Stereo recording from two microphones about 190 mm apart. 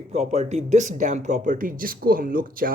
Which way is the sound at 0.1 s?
35° right (ahead or behind).